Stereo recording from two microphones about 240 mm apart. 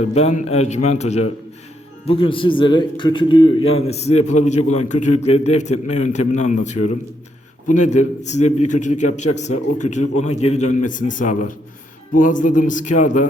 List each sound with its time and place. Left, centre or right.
0.0 s a man's voice: left